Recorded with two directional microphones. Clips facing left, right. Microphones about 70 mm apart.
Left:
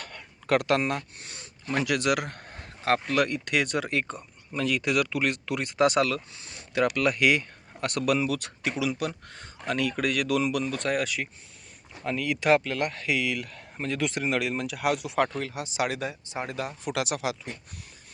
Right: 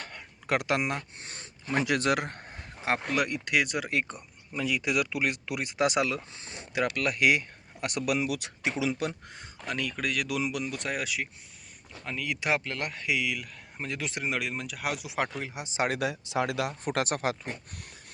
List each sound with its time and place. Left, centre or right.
0.0 s a sound: centre
1.2 s speech: right
1.6 s a man's voice: right
2.5 s a sound: centre
3.1 s speech: centre
6.3 s speech: right
6.9 s a man's voice: centre; by 9.1 s right
9.6 s speech: centre; by 15.9 s right
15.9 s speech: right
16.8 s speech: right